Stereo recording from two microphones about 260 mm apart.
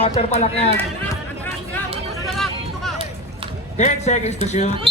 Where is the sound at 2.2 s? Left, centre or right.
Centre.